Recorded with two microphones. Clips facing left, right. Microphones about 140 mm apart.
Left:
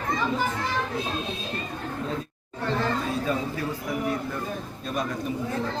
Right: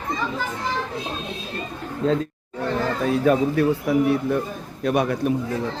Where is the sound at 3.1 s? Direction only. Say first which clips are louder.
Right 9 dB; 70° right (ahead or behind).